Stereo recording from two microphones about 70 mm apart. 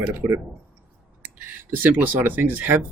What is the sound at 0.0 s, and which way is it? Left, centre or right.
Speech, right.